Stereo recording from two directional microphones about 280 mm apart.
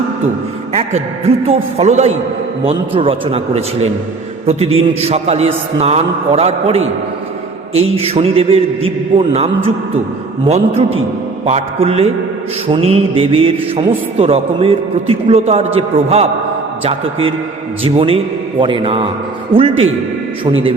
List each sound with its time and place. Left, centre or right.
0.7 s a man's voice: right